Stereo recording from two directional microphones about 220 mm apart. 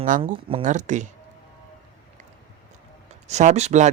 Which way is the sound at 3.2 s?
30° right (ahead or behind).